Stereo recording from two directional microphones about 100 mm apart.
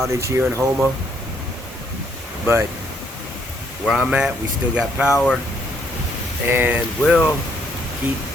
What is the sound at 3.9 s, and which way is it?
Speech, 10° right (ahead or behind).